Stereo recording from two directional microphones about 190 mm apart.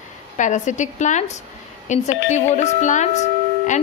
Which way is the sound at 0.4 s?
40° left (ahead or behind).